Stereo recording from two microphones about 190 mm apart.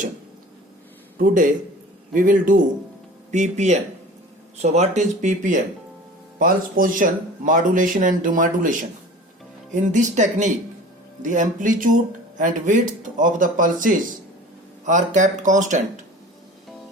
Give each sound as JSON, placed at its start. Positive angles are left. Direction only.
{"t": 1.2, "sound": "speech", "side_deg": -45}